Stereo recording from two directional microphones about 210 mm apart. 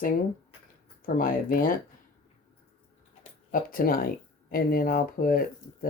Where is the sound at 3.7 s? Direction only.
45° left (ahead or behind).